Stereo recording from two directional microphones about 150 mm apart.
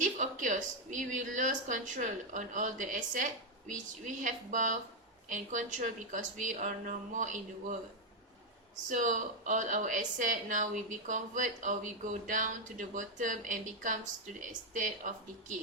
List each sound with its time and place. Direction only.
0.0 s a woman's voice: 55° right (ahead or behind)
8.9 s a woman's voice: 55° right (ahead or behind)